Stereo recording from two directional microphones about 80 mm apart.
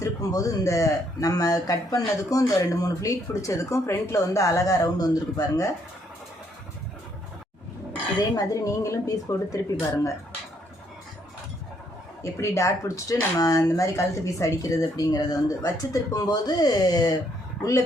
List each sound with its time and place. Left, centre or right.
0.0 s speech: left
8.4 s speech: left
12.2 s speech: left